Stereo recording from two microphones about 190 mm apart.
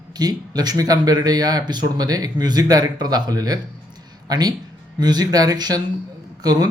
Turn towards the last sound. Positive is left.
turn(degrees=-20)  # may be behind; listen again after turning